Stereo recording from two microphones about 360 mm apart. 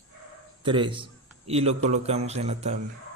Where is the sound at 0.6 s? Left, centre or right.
Centre.